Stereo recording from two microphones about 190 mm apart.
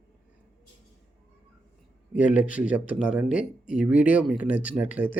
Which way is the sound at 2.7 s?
45° left (ahead or behind).